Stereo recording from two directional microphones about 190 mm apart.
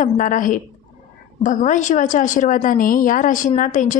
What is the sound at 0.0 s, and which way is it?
A woman's voice, 45° left (ahead or behind).